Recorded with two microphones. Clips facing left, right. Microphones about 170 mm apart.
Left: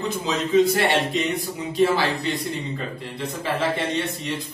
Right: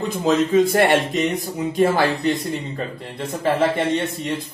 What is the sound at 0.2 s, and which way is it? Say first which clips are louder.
Speech: right 3 dB; 50° right (ahead or behind).